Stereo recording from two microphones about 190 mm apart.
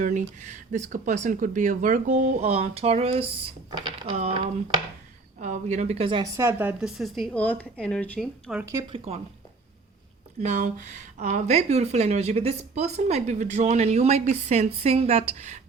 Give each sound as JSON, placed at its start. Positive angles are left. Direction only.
{"t": 0.0, "sound": "speech", "side_deg": -40}
{"t": 4.2, "sound": "a woman's voice", "side_deg": -35}
{"t": 8.9, "sound": "speech", "side_deg": -30}
{"t": 10.4, "sound": "speech", "side_deg": -40}